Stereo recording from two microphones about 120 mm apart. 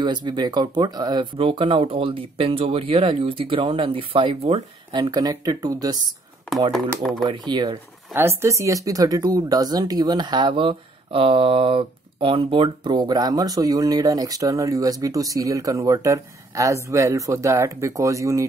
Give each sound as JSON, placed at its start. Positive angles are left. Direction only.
{"t": 0.0, "sound": "speech", "side_deg": -40}
{"t": 7.0, "sound": "speech", "side_deg": 0}
{"t": 7.2, "sound": "speech", "side_deg": -40}
{"t": 8.1, "sound": "speech", "side_deg": -20}